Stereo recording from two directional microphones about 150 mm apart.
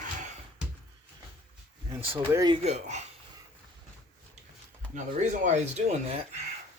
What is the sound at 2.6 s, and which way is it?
Speech, 50° right (ahead or behind).